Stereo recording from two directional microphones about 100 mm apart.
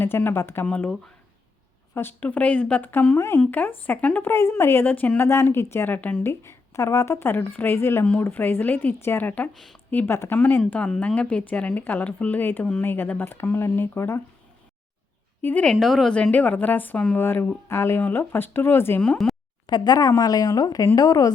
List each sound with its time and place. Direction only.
0.0 s a woman's voice: 20° left (ahead or behind)
2.0 s speech: 20° left (ahead or behind)
3.2 s a woman's voice: 25° left (ahead or behind)
4.3 s a woman's voice: 25° left (ahead or behind)
6.4 s a woman's voice: 30° left (ahead or behind)
9.5 s a woman's voice: centre (ahead or behind)
9.9 s a woman's voice: 20° left (ahead or behind)
15.4 s a woman's voice: 20° left (ahead or behind)
15.7 s a woman's voice: centre (ahead or behind)
16.1 s a woman's voice: 15° left (ahead or behind)
19.0 s speech: 5° left (ahead or behind)
19.6 s speech: 45° left (ahead or behind)